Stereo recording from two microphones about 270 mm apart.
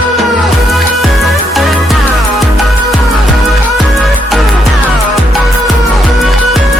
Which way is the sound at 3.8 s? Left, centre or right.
Centre.